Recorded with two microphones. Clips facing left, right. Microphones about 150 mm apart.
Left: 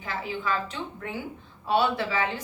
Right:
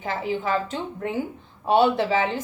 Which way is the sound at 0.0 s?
50° right (ahead or behind).